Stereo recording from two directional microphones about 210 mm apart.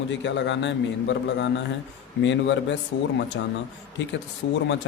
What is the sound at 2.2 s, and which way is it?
Speech, 60° left (ahead or behind).